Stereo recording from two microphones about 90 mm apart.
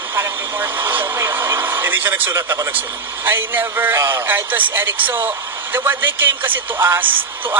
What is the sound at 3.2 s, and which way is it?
A man's voice, 20° right (ahead or behind).